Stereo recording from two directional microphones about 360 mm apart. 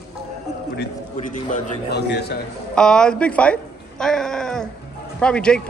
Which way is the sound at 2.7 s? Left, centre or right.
Centre.